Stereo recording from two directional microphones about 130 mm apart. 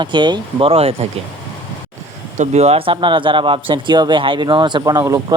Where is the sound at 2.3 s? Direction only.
55° right (ahead or behind).